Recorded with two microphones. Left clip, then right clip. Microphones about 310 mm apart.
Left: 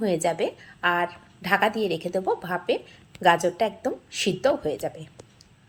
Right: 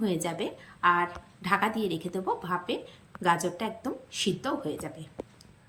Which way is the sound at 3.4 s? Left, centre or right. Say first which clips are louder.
Left 8 dB; centre.